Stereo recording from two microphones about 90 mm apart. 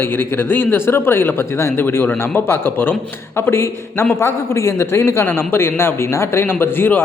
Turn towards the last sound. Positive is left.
turn(degrees=25)  # may be behind; listen again after turning